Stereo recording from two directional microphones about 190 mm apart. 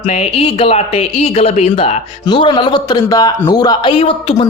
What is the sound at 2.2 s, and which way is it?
A man's voice, 25° left (ahead or behind).